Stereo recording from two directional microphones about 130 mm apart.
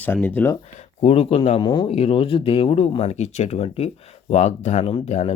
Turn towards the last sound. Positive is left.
turn(degrees=50)  # may be behind; listen again after turning